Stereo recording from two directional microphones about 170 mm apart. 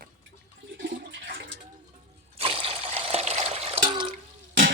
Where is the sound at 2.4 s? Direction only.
35° right (ahead or behind).